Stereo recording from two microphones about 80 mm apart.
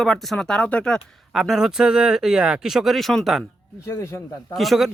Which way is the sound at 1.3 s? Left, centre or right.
Centre.